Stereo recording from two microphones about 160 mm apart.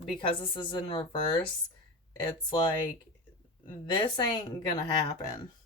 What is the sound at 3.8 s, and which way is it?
Speech, 30° left (ahead or behind).